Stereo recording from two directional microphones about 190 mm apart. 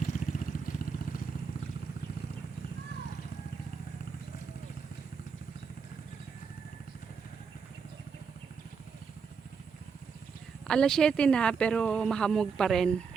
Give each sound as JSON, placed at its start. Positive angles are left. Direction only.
{"t": 0.0, "sound": "vehicle", "side_deg": 45}
{"t": 10.7, "sound": "speech", "side_deg": 5}